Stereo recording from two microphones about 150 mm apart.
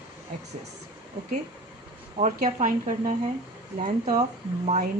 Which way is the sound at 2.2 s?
55° right (ahead or behind).